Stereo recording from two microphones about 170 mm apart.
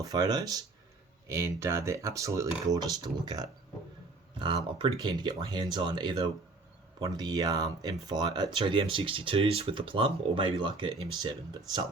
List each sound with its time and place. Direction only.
0.1 s speech: 20° right (ahead or behind)